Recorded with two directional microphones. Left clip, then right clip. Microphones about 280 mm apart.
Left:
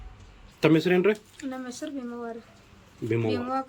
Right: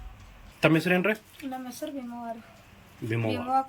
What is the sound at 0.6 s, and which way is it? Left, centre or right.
Speech, centre.